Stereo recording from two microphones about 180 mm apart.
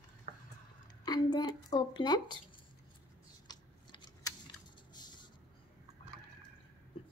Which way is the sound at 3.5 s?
25° left (ahead or behind).